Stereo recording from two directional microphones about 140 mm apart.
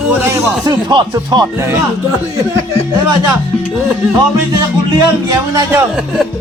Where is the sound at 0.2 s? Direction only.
20° right (ahead or behind).